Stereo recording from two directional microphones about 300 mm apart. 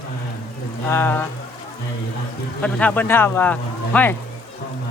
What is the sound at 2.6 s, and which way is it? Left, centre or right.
Speech, centre.